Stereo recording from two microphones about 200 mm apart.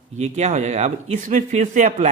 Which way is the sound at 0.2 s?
35° right (ahead or behind).